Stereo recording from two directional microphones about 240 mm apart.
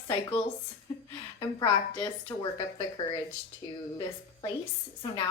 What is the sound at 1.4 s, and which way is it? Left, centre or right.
A woman's voice, centre.